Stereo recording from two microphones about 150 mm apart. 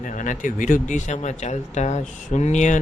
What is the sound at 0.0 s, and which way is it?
Speech, 60° left (ahead or behind).